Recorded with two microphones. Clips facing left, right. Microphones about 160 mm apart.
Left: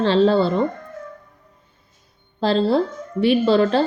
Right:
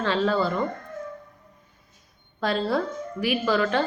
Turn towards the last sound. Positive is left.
turn(degrees=30)  # may be behind; listen again after turning